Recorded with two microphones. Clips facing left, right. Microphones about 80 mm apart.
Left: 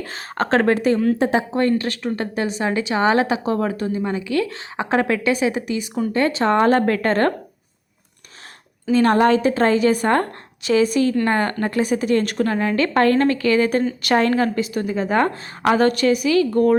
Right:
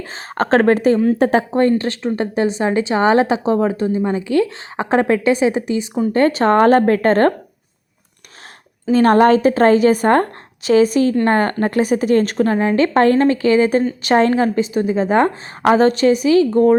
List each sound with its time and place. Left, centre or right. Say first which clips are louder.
0.0 s a woman's voice: right 3 dB; right
1.2 s speech: right 4 dB; right
1.8 s a woman's voice: right 4 dB; right
6.1 s a woman's voice: right 4 dB; right
8.9 s a woman's voice: right 4 dB; right